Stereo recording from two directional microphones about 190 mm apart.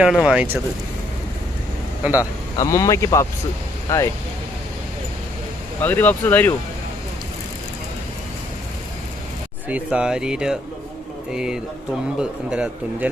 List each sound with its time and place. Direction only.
0.0 s speech: 5° right (ahead or behind)
2.6 s speech: 15° left (ahead or behind)
5.8 s speech: 10° left (ahead or behind)
9.6 s speech: 5° right (ahead or behind)